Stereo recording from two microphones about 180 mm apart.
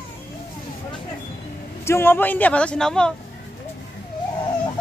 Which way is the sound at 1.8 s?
15° left (ahead or behind).